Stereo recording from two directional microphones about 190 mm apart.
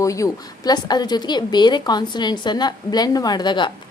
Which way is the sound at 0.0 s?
15° left (ahead or behind).